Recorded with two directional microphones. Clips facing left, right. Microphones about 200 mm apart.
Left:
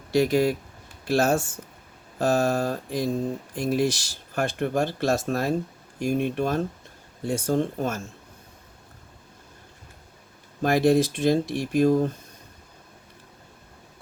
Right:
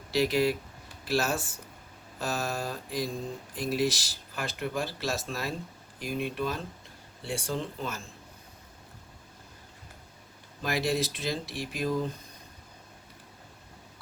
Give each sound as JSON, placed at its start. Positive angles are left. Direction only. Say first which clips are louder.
{"t": 0.1, "sound": "speech", "louder": "left 5 dB", "side_deg": 50}
{"t": 10.6, "sound": "speech", "louder": "left 9 dB", "side_deg": 50}